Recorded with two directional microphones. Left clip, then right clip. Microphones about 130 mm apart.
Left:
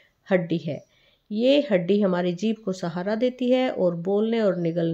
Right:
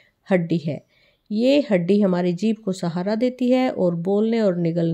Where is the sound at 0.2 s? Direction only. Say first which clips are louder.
Right 2 dB; 40° right (ahead or behind).